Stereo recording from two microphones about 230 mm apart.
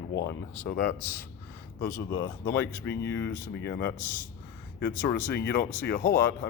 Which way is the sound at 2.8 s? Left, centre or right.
Left.